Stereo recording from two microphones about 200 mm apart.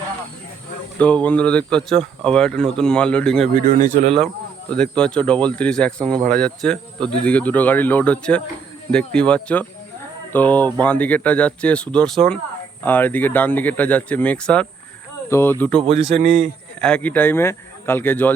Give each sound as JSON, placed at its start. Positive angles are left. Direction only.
{"t": 0.9, "sound": "speech", "side_deg": 5}
{"t": 3.5, "sound": "speech", "side_deg": -45}
{"t": 4.7, "sound": "speech", "side_deg": 5}
{"t": 16.2, "sound": "a man's voice", "side_deg": -35}
{"t": 16.8, "sound": "speech", "side_deg": 5}